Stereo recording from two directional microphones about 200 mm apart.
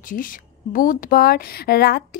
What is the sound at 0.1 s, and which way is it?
A woman's voice, 45° left (ahead or behind).